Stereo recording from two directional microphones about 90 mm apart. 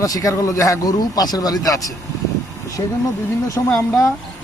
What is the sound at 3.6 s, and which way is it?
Speech, 25° left (ahead or behind).